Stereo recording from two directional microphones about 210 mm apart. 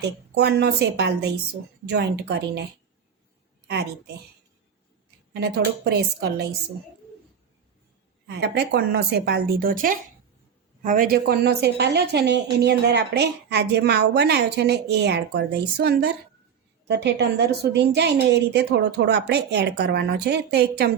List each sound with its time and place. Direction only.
0.0 s a woman's voice: 55° right (ahead or behind)
3.7 s a woman's voice: 50° right (ahead or behind)
5.3 s a woman's voice: 50° right (ahead or behind)
8.3 s a woman's voice: 50° right (ahead or behind)